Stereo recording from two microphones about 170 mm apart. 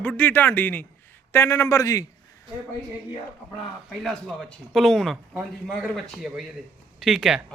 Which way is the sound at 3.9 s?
Centre (ahead or behind).